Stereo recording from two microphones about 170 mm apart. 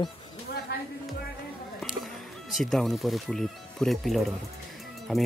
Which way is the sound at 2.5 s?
Centre (ahead or behind).